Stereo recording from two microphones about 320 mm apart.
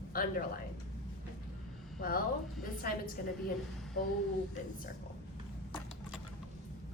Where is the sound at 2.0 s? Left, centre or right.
Left.